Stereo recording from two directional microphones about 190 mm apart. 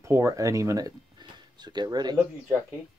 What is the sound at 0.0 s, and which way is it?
Speech, 15° right (ahead or behind).